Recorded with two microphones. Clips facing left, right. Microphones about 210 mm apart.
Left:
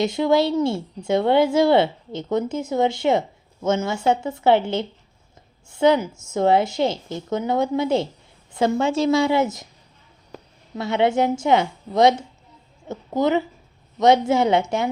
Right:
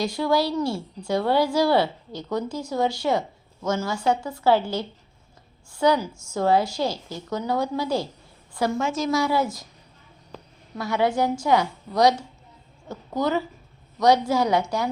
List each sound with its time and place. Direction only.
0.0 s a woman's voice: 20° left (ahead or behind)
10.8 s a woman's voice: 25° left (ahead or behind)